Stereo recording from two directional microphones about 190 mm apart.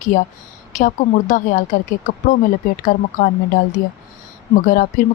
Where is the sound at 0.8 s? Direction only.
40° left (ahead or behind).